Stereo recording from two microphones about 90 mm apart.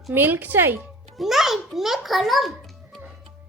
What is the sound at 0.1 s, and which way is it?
Speech, 25° right (ahead or behind).